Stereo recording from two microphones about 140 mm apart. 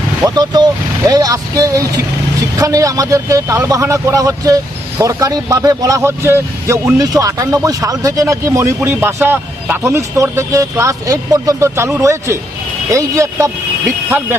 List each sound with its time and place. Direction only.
0.3 s a man's voice: 30° right (ahead or behind)